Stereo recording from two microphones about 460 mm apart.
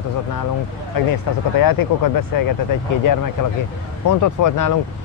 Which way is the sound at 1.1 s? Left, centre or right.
Left.